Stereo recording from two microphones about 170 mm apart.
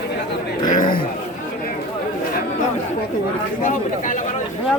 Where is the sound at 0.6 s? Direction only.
50° left (ahead or behind).